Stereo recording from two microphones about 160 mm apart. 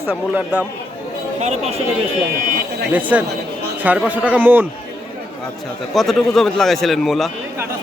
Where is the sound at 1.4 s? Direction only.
45° right (ahead or behind).